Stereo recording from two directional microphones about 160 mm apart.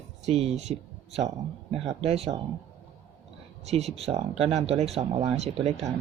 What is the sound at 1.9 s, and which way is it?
Speech, 40° right (ahead or behind).